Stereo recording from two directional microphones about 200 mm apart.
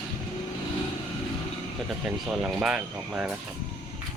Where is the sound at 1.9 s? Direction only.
5° right (ahead or behind).